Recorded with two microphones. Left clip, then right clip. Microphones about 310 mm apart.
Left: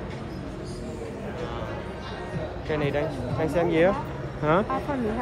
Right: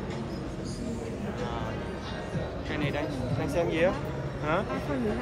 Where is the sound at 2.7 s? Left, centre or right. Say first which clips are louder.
Left 6 dB; centre.